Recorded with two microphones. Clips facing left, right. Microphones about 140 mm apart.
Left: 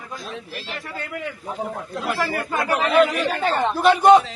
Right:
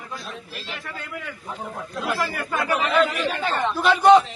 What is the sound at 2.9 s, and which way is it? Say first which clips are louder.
Speech: left 5 dB; 15° left (ahead or behind).